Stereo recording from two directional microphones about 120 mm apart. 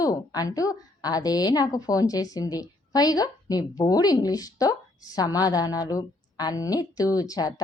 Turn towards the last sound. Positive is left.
turn(degrees=30)  # may be behind; listen again after turning